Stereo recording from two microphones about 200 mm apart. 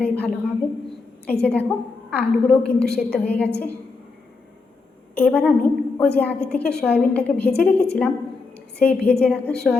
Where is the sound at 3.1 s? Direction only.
10° left (ahead or behind).